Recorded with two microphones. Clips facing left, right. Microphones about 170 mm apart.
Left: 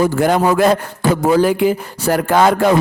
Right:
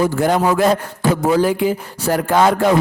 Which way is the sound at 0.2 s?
75° left (ahead or behind).